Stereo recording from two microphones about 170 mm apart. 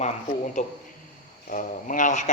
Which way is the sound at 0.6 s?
40° left (ahead or behind).